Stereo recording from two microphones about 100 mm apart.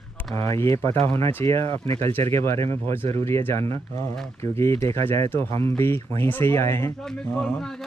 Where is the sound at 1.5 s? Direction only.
70° right (ahead or behind).